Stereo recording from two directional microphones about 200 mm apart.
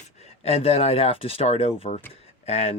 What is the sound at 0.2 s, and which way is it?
Speech, 30° left (ahead or behind).